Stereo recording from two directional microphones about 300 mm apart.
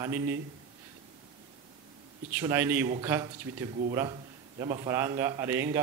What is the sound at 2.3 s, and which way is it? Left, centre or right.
A man's voice, centre.